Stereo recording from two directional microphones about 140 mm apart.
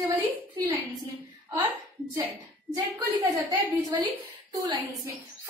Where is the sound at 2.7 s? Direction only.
25° right (ahead or behind).